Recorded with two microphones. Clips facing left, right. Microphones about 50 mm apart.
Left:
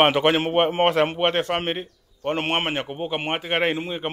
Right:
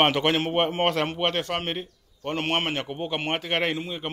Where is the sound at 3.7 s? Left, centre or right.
Left.